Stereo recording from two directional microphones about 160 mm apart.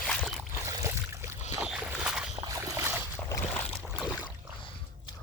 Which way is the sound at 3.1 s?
15° left (ahead or behind).